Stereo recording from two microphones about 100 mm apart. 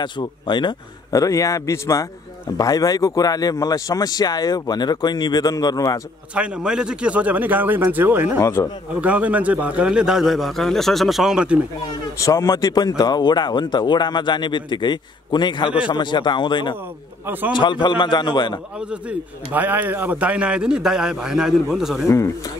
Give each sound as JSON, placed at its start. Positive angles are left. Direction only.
{"t": 0.0, "sound": "speech", "side_deg": 50}
{"t": 1.1, "sound": "a man's voice", "side_deg": 35}
{"t": 6.3, "sound": "a man's voice", "side_deg": -10}
{"t": 8.4, "sound": "speech", "side_deg": 25}
{"t": 9.0, "sound": "a man's voice", "side_deg": -15}
{"t": 12.2, "sound": "speech", "side_deg": 35}
{"t": 18.8, "sound": "a man's voice", "side_deg": -10}
{"t": 22.0, "sound": "speech", "side_deg": 30}